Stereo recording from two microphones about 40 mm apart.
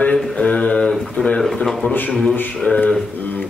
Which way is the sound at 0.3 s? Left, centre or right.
Left.